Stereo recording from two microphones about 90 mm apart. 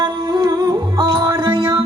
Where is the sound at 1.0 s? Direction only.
75° right (ahead or behind).